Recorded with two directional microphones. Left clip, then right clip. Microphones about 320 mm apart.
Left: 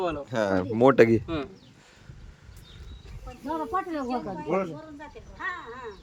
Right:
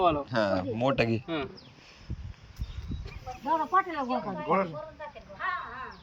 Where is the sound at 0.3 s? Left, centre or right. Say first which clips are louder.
Left 2 dB; centre.